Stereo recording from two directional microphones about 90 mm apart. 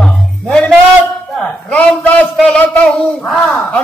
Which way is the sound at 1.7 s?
15° left (ahead or behind).